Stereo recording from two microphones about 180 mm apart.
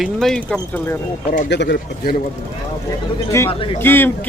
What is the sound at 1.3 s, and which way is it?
Speech, 65° left (ahead or behind).